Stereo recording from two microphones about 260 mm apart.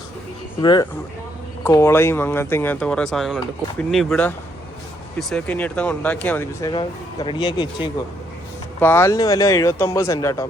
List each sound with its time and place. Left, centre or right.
0.6 s speech: centre